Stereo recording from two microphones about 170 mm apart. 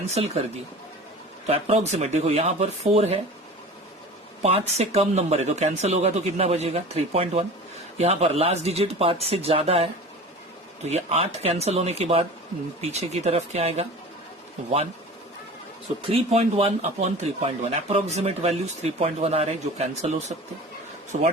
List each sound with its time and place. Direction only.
0.1 s speech: 40° right (ahead or behind)
1.5 s speech: 40° right (ahead or behind)
4.4 s speech: 40° right (ahead or behind)
16.0 s speech: 35° right (ahead or behind)